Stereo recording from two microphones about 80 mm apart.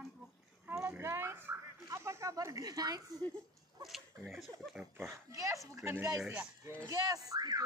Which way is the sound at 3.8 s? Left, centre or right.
Centre.